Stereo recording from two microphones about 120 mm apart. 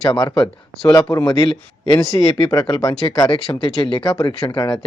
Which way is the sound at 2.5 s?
35° left (ahead or behind).